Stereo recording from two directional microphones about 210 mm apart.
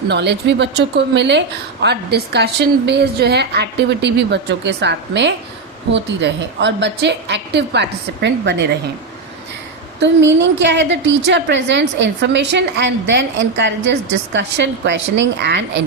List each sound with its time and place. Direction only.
0.1 s a woman's voice: 55° right (ahead or behind)
10.0 s a woman's voice: 60° right (ahead or behind)